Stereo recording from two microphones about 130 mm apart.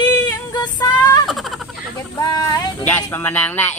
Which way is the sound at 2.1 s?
30° left (ahead or behind).